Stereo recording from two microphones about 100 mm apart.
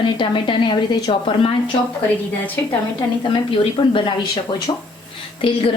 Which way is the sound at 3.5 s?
60° left (ahead or behind).